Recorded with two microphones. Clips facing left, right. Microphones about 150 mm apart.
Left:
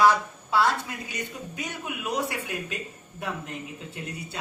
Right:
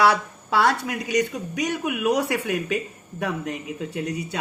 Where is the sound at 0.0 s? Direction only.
70° right (ahead or behind).